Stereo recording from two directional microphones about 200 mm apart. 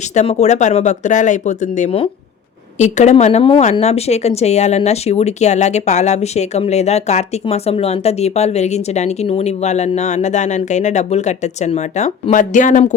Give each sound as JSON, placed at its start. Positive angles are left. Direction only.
{"t": 0.1, "sound": "a woman's voice", "side_deg": 35}